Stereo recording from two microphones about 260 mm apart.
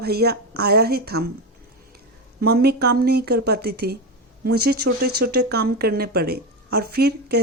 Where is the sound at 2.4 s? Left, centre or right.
Right.